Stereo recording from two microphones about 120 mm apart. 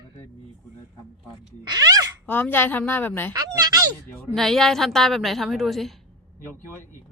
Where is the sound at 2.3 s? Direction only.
15° left (ahead or behind).